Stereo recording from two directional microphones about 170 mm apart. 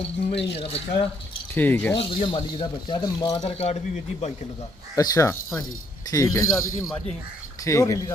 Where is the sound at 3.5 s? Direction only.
40° left (ahead or behind).